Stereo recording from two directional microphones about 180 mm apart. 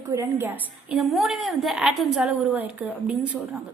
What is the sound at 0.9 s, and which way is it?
A woman's voice, centre (ahead or behind).